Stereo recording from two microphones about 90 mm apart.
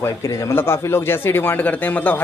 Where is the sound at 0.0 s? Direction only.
35° left (ahead or behind).